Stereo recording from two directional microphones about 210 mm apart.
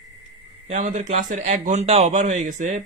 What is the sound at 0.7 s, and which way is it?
A man's voice, 35° right (ahead or behind).